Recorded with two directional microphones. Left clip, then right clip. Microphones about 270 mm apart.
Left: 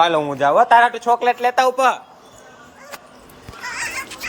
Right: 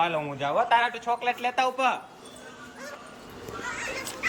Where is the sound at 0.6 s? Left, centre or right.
Centre.